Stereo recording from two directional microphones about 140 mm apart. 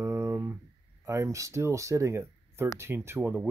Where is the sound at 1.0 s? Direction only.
20° right (ahead or behind).